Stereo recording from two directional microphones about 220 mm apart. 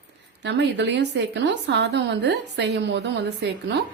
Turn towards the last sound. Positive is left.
turn(degrees=-50)  # may be behind; listen again after turning